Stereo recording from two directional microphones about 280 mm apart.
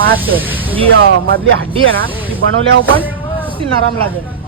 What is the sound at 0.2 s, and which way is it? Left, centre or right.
Speech, centre.